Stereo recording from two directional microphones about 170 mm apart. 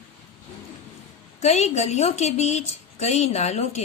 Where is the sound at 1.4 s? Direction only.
40° left (ahead or behind).